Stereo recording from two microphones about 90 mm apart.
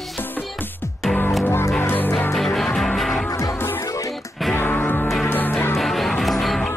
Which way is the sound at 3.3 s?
40° left (ahead or behind).